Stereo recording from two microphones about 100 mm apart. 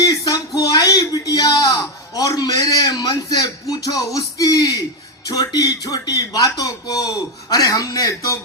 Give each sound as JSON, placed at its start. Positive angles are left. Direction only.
{"t": 0.0, "sound": "speech", "side_deg": 35}